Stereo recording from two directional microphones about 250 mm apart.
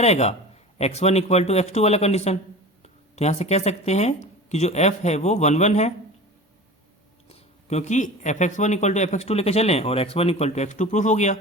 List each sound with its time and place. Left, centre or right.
0.0 s speech: left
7.3 s speech: left